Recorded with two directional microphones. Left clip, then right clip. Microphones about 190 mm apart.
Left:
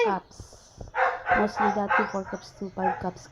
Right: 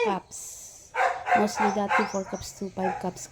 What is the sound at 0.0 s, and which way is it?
Speech, 10° right (ahead or behind).